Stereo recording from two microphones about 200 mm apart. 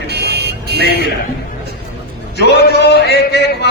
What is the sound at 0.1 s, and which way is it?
Car alarm, 55° right (ahead or behind).